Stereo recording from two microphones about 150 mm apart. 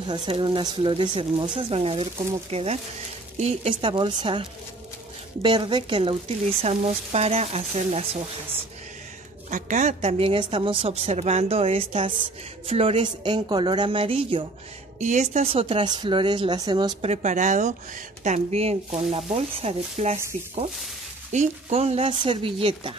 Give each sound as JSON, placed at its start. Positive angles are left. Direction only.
{"t": 0.4, "sound": "a woman's voice", "side_deg": -30}
{"t": 3.7, "sound": "a woman's voice", "side_deg": -35}
{"t": 9.5, "sound": "a woman's voice", "side_deg": -55}
{"t": 15.0, "sound": "a woman's voice", "side_deg": -50}
{"t": 17.0, "sound": "speech", "side_deg": -50}
{"t": 21.3, "sound": "a woman's voice", "side_deg": -50}